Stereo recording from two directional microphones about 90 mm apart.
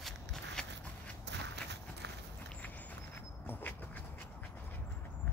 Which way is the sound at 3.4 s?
25° left (ahead or behind).